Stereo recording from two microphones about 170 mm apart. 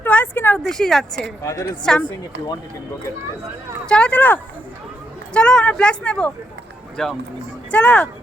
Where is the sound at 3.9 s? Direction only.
5° left (ahead or behind).